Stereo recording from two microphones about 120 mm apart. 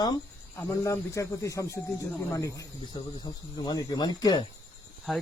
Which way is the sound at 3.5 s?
35° left (ahead or behind).